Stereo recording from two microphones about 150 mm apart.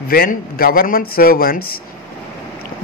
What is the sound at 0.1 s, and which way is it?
A man's voice, 80° left.